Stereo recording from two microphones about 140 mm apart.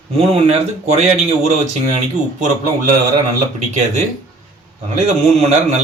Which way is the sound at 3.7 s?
55° right (ahead or behind).